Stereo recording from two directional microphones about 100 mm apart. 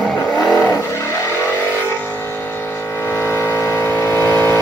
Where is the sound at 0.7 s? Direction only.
25° left (ahead or behind).